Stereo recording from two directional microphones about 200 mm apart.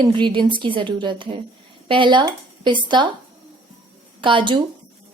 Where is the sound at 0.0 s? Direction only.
25° right (ahead or behind).